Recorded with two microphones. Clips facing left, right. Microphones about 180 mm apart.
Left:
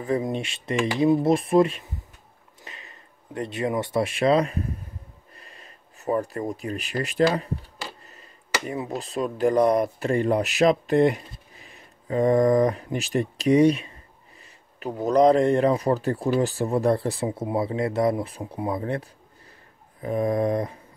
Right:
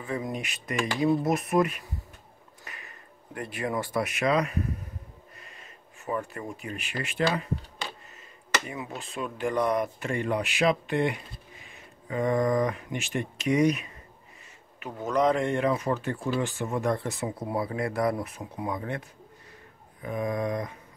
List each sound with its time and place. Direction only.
0.2 s speech: 25° left (ahead or behind)
8.6 s speech: 40° left (ahead or behind)